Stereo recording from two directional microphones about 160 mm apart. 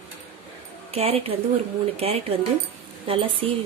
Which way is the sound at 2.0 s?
40° right (ahead or behind).